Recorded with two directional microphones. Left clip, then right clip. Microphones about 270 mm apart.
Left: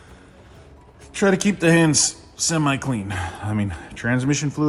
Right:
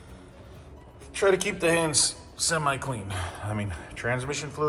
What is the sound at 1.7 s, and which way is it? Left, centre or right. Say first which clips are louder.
A man's voice: left 7 dB; left.